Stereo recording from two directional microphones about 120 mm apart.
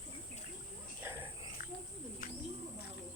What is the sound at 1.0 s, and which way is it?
Cricket, 20° right (ahead or behind).